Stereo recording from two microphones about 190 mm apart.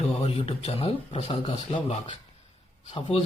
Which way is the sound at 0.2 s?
30° left (ahead or behind).